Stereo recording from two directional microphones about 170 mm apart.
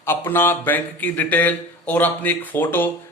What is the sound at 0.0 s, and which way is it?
Speech, 15° left (ahead or behind).